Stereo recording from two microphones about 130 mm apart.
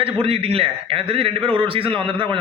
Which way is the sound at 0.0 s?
50° right (ahead or behind).